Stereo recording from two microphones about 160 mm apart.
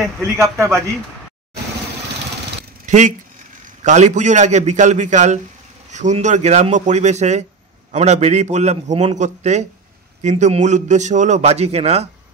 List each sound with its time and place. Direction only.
0.2 s a man's voice: 20° right (ahead or behind)
2.9 s a man's voice: 50° right (ahead or behind)